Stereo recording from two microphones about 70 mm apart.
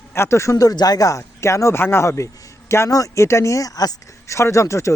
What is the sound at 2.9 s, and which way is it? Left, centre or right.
Speech, left.